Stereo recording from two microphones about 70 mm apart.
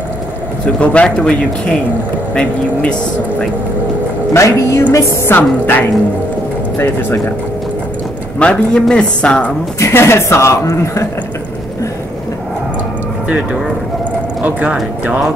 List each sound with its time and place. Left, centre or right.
0.7 s speech: centre
2.3 s speech: centre
4.3 s speech: left
4.9 s speech: left
8.4 s speech: centre
9.8 s speech: left
14.4 s speech: centre